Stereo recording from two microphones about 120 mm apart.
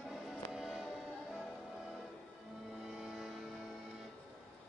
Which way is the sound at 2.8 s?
5° right (ahead or behind).